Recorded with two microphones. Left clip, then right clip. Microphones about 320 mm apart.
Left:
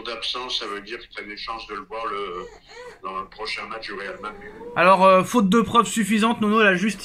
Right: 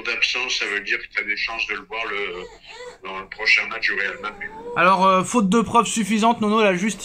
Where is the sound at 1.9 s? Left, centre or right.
Centre.